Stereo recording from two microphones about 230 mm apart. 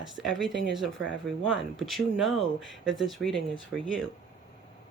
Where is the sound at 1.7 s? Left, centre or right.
Centre.